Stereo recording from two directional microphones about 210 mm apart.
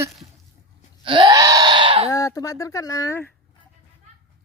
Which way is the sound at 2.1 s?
15° left (ahead or behind).